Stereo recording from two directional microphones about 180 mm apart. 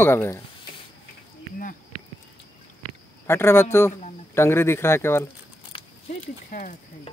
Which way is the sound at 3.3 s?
15° left (ahead or behind).